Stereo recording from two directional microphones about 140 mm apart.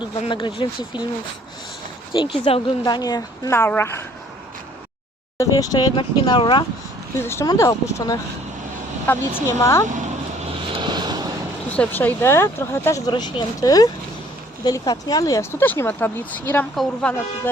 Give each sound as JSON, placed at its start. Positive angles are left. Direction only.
{"t": 0.3, "sound": "speech", "side_deg": 35}
{"t": 2.1, "sound": "speech", "side_deg": 40}
{"t": 2.8, "sound": "speech", "side_deg": 30}
{"t": 5.4, "sound": "speech", "side_deg": 25}
{"t": 7.2, "sound": "speech", "side_deg": 20}
{"t": 9.1, "sound": "speech", "side_deg": 15}
{"t": 10.8, "sound": "vehicle", "side_deg": -35}
{"t": 11.7, "sound": "speech", "side_deg": 10}
{"t": 13.1, "sound": "speech", "side_deg": 30}